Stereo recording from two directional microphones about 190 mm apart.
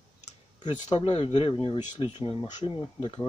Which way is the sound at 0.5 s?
25° left (ahead or behind).